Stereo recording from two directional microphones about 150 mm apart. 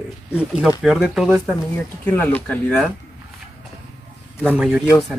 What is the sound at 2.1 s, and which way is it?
Speech, 10° left (ahead or behind).